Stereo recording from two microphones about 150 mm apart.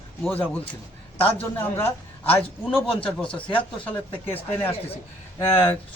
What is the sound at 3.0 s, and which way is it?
Speech, 5° left (ahead or behind).